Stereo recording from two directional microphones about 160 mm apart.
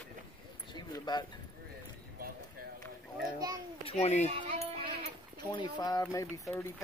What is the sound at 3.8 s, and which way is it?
Speech, 40° left (ahead or behind).